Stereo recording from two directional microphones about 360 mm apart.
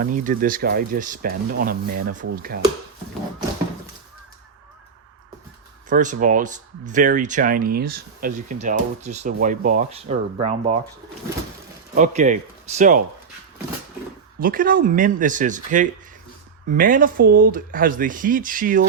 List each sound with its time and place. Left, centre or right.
0.0 s speech: right
5.9 s speech: right
11.9 s speech: right
14.3 s speech: right